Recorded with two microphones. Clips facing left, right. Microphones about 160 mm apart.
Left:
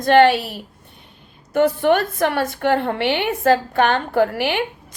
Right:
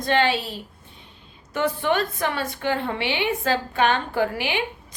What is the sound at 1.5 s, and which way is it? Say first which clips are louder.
A woman's voice: left 7 dB; 50° left (ahead or behind).